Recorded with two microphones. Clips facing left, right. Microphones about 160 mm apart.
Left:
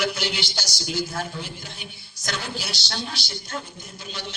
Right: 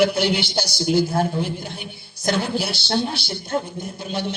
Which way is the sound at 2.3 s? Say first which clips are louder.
Right 9 dB; 55° right (ahead or behind).